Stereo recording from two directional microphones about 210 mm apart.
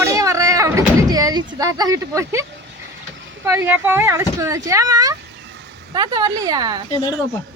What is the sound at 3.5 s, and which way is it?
Speech, 10° right (ahead or behind).